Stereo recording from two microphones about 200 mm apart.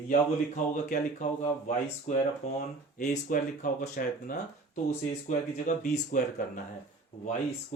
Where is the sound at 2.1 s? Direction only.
40° left (ahead or behind).